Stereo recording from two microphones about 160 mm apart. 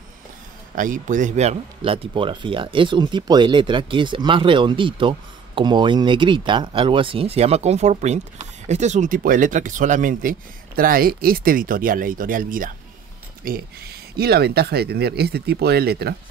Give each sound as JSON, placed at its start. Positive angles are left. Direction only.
{"t": 0.7, "sound": "speech", "side_deg": -55}
{"t": 1.8, "sound": "speech", "side_deg": -30}
{"t": 10.8, "sound": "speech", "side_deg": -65}
{"t": 13.4, "sound": "speech", "side_deg": -70}